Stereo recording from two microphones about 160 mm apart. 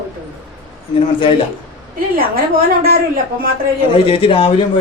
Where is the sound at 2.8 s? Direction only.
65° right (ahead or behind).